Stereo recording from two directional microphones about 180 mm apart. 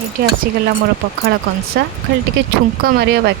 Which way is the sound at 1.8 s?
65° right (ahead or behind).